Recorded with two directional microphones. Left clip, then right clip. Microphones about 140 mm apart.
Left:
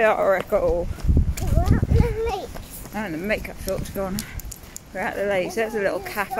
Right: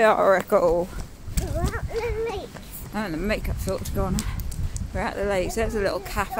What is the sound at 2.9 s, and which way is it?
Speech, 25° right (ahead or behind).